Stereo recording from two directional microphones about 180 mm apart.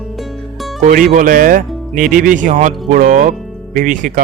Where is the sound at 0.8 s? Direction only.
50° right (ahead or behind).